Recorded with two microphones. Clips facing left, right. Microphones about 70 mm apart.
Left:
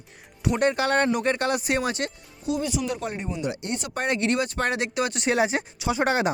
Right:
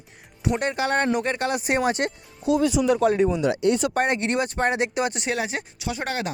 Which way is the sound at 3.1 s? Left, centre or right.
Right.